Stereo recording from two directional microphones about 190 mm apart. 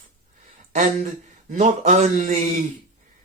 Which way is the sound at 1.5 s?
40° right (ahead or behind).